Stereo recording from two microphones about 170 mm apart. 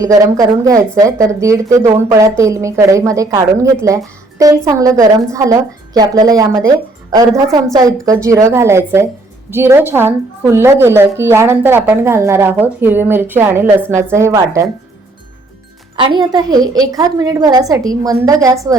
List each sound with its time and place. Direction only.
0.0 s a woman's voice: 20° right (ahead or behind)
16.0 s a woman's voice: 25° right (ahead or behind)